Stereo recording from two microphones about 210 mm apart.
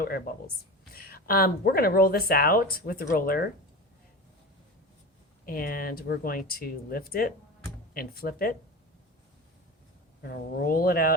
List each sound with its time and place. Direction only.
0.9 s speech: 45° left (ahead or behind)
5.5 s speech: 45° left (ahead or behind)
10.2 s speech: 45° left (ahead or behind)